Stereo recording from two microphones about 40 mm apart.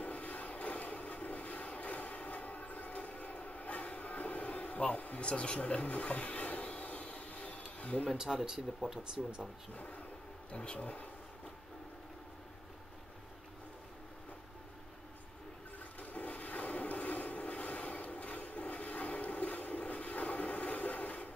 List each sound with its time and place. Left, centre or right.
0.0 s vehicle: left
5.2 s a sound: left
8.1 s speech: centre
10.5 s speech: left
10.8 s speech: left
16.0 s a sound: left